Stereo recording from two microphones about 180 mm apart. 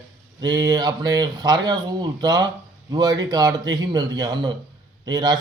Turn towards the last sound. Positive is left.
turn(degrees=-20)  # may be behind; listen again after turning